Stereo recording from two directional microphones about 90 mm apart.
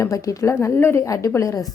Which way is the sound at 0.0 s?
35° left (ahead or behind).